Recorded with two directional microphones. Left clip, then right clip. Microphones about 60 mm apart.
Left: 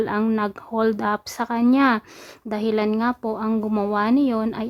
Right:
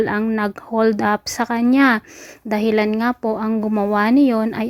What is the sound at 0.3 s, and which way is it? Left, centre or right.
Speech, right.